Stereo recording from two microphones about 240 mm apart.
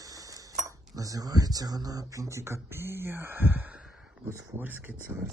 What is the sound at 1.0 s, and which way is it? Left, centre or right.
Speech, centre.